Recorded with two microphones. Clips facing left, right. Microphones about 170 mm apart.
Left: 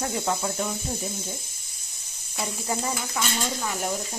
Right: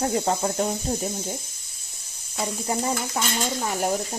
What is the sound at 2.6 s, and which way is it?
Speech, 30° right (ahead or behind).